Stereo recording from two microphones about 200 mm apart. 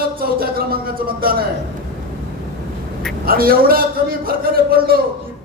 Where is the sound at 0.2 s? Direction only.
45° right (ahead or behind).